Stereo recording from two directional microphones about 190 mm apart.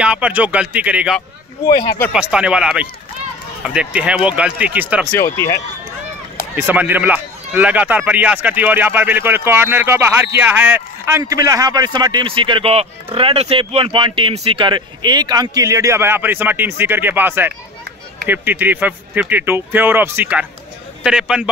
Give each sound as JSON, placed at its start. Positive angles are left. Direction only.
{"t": 0.0, "sound": "speech", "side_deg": -5}
{"t": 1.7, "sound": "speech", "side_deg": 20}
{"t": 2.1, "sound": "speech", "side_deg": -5}
{"t": 5.1, "sound": "speech", "side_deg": 15}
{"t": 6.5, "sound": "speech", "side_deg": -10}